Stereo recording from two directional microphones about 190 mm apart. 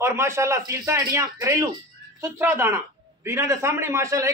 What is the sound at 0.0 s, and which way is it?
A man's voice, 15° right (ahead or behind).